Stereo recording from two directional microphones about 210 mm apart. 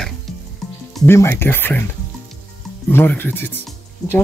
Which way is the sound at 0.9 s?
10° left (ahead or behind).